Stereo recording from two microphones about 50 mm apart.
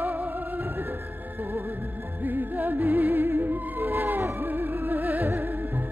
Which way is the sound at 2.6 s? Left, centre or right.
Right.